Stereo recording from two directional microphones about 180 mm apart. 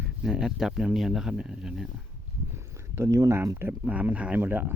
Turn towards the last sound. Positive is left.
turn(degrees=-10)  # may be behind; listen again after turning